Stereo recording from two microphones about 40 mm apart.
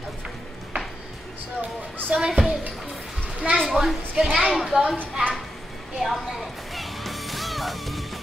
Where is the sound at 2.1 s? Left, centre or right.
Centre.